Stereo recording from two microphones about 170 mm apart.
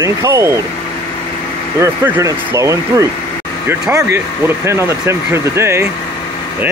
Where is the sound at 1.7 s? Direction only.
15° right (ahead or behind).